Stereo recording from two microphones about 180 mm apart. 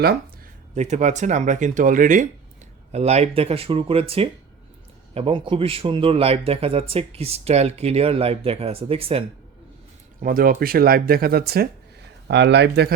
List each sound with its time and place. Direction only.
0.8 s speech: 40° right (ahead or behind)
10.2 s speech: 50° right (ahead or behind)
12.3 s speech: 75° right (ahead or behind)